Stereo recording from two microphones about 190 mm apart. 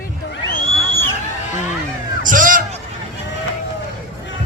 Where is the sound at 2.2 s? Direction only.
45° right (ahead or behind).